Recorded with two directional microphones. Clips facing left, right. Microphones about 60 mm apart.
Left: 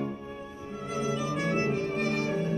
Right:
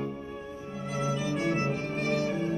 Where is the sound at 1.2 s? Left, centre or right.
Left.